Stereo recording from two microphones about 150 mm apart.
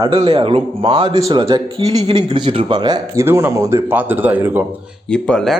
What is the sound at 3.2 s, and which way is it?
Speech, 15° right (ahead or behind).